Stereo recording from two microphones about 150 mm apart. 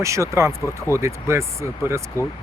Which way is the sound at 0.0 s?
20° right (ahead or behind).